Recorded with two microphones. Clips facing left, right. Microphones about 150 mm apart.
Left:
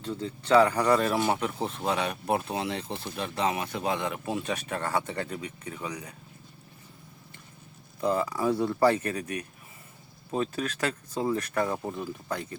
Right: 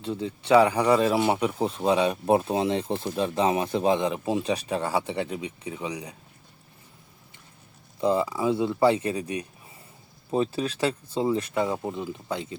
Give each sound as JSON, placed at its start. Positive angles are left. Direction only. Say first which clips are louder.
{"t": 0.1, "sound": "speech", "louder": "right 3 dB", "side_deg": -15}
{"t": 8.0, "sound": "speech", "louder": "right 3 dB", "side_deg": -10}
{"t": 10.3, "sound": "speech", "louder": "right 4 dB", "side_deg": -25}
{"t": 11.3, "sound": "speech", "louder": "right 2 dB", "side_deg": -20}